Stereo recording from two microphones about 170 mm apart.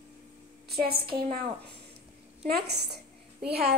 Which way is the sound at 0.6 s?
65° right (ahead or behind).